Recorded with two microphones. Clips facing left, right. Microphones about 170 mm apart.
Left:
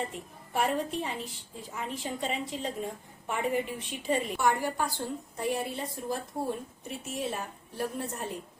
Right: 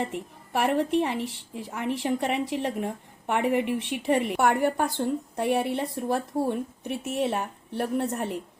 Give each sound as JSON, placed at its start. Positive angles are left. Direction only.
{"t": 0.0, "sound": "a woman's voice", "side_deg": -70}